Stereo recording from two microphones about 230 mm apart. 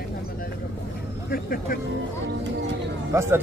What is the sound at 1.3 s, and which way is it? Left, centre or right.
Speech, left.